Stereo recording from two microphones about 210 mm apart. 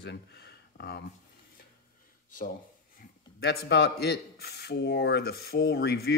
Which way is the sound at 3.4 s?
50° left (ahead or behind).